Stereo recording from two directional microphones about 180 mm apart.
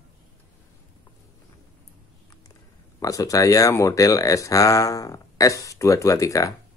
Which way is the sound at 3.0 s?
20° left (ahead or behind).